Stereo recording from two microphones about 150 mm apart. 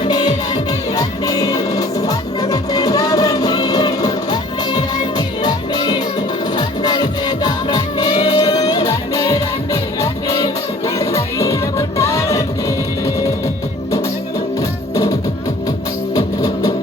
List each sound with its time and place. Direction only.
0.0 s music: 25° left (ahead or behind)
14.9 s music: 20° left (ahead or behind)